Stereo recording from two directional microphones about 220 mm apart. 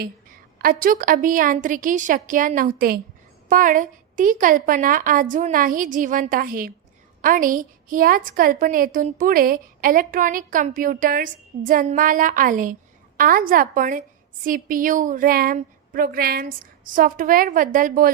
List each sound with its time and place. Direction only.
0.6 s a woman's voice: 40° right (ahead or behind)